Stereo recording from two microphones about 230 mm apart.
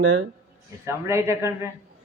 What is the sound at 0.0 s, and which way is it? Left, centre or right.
Speech, right.